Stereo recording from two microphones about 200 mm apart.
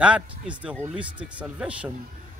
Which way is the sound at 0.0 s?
5° right (ahead or behind).